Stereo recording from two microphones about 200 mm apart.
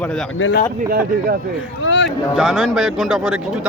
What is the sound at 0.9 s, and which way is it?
Speech, 50° right (ahead or behind).